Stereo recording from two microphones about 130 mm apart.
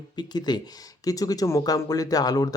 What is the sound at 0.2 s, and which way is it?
Speech, 35° left (ahead or behind).